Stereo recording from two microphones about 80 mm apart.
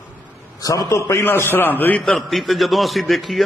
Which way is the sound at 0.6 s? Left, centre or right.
Left.